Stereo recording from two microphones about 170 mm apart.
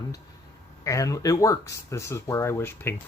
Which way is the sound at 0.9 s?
20° left (ahead or behind).